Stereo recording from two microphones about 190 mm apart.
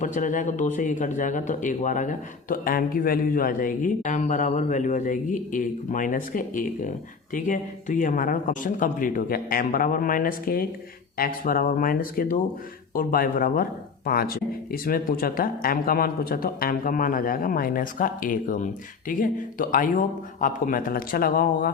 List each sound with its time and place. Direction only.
0.0 s speech: 45° left (ahead or behind)